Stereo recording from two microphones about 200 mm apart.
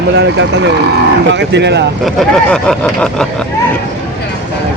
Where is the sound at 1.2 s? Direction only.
60° right (ahead or behind).